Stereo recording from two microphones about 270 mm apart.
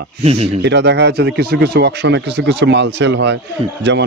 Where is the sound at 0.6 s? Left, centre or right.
Right.